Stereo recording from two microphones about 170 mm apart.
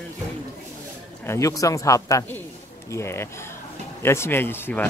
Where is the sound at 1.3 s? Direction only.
20° left (ahead or behind).